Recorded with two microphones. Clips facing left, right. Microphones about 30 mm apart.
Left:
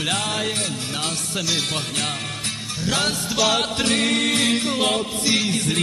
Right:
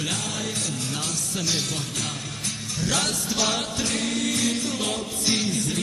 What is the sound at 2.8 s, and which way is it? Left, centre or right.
Music, left.